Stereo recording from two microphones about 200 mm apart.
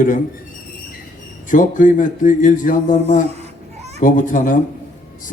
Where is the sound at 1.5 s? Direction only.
40° left (ahead or behind).